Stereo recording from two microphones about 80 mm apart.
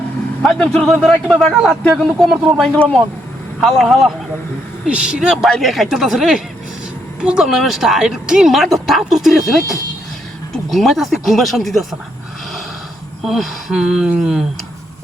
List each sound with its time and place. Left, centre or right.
0.4 s a man's voice: centre
0.9 s speech: centre
3.6 s speech: centre
13.2 s speech: centre